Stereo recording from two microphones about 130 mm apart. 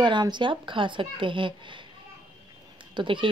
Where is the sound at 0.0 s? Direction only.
35° right (ahead or behind).